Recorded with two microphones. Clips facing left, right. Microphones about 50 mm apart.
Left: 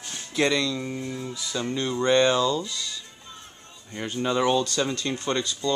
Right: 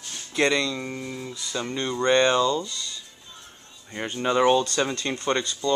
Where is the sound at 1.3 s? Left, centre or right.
Centre.